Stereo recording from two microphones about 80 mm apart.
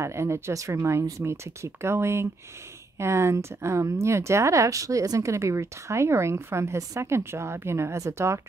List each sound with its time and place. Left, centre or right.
0.0 s speech: right